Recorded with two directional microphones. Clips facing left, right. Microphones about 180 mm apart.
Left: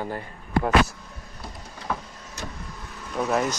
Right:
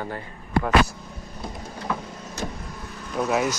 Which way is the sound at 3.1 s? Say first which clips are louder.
Right 1 dB; 5° right (ahead or behind).